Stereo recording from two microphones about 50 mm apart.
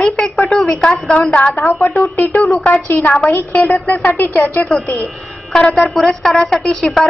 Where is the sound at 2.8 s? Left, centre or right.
Left.